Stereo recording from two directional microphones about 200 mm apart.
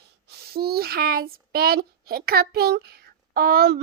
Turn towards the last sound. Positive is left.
turn(degrees=-50)  # may be behind; listen again after turning